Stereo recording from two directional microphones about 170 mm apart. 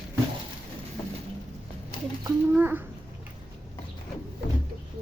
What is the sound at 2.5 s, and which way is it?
Speech, 10° right (ahead or behind).